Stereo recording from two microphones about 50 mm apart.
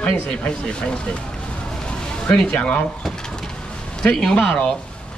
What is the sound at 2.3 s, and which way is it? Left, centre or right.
Speech, centre.